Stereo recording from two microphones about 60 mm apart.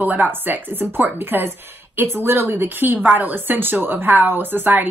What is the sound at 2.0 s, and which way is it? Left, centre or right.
Speech, right.